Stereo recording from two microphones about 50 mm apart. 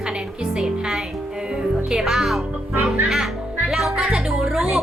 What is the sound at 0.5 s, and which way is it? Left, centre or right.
Music, centre.